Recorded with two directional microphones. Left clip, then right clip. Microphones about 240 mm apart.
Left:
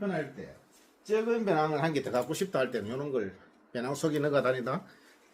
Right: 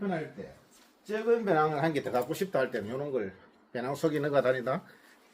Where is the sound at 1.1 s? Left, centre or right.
Centre.